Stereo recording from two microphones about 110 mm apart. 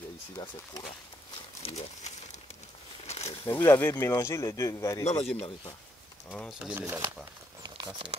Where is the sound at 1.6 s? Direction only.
75° left (ahead or behind).